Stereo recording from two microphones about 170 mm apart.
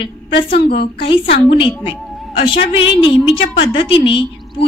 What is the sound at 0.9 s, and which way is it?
A woman's voice, 30° left (ahead or behind).